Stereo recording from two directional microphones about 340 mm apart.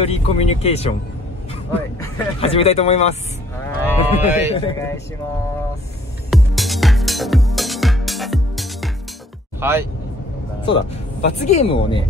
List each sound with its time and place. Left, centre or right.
0.0 s speech: centre
2.4 s speech: centre
3.9 s speech: centre
4.6 s speech: centre
6.3 s music: centre
9.6 s speech: centre
10.6 s speech: centre